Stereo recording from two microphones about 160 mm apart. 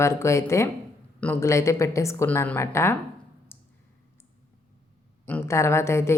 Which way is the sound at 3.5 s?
15° left (ahead or behind).